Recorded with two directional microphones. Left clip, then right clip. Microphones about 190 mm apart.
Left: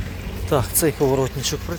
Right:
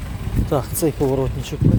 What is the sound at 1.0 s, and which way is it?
Speech, 15° left (ahead or behind).